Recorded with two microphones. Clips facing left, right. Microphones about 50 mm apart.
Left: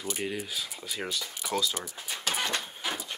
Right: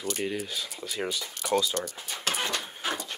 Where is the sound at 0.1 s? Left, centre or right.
Centre.